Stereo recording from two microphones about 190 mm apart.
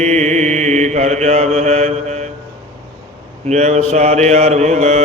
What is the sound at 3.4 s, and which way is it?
Mantra, 35° right (ahead or behind).